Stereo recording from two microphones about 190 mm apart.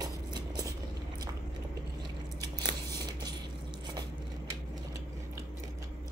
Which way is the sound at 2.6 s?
20° right (ahead or behind).